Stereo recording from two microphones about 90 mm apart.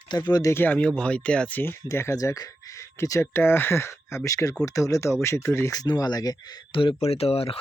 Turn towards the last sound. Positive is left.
turn(degrees=90)